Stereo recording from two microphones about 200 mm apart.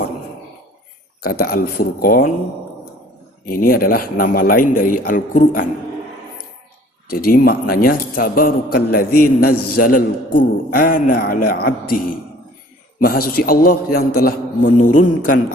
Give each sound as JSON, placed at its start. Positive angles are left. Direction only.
{"t": 1.2, "sound": "a man's voice", "side_deg": 50}
{"t": 3.4, "sound": "a man's voice", "side_deg": 45}
{"t": 7.1, "sound": "a man's voice", "side_deg": 50}
{"t": 13.0, "sound": "a man's voice", "side_deg": 45}